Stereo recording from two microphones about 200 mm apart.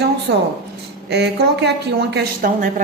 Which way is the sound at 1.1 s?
55° right (ahead or behind).